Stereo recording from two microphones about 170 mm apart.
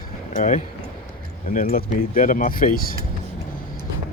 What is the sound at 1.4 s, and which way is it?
Speech, 55° left (ahead or behind).